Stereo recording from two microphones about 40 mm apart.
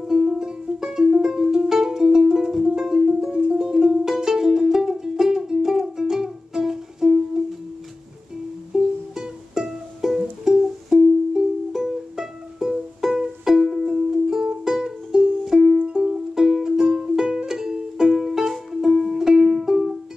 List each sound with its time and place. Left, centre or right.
0.0 s music: centre
8.7 s music: centre